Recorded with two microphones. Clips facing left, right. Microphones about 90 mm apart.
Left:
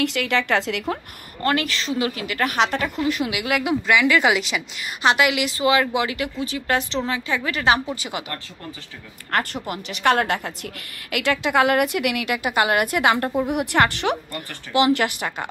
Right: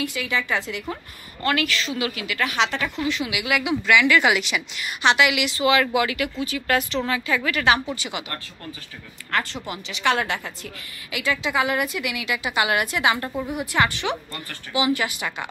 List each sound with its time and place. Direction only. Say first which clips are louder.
0.0 s a woman's voice: left 4 dB; 70° left (ahead or behind)
1.4 s a woman's voice: left 1 dB; 35° left (ahead or behind)
9.3 s a woman's voice: left 2 dB; 55° left (ahead or behind)
13.5 s a woman's voice: left 1 dB; 65° left (ahead or behind); by 15.4 s 50° left (ahead or behind)